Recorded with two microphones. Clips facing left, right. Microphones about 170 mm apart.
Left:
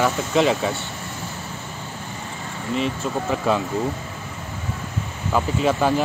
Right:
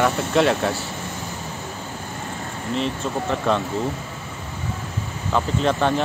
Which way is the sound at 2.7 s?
5° left (ahead or behind).